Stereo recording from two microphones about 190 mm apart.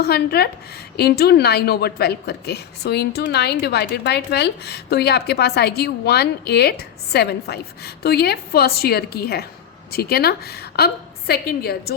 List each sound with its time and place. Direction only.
0.0 s a woman's voice: 55° left (ahead or behind)